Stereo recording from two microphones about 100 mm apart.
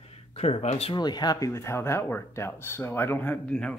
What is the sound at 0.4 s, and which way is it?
Speech, 90° left.